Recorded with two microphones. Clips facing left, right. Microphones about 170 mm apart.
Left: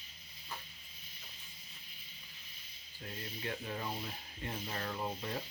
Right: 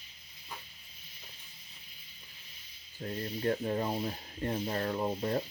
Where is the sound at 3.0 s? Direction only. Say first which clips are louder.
Right 9 dB; 45° right (ahead or behind).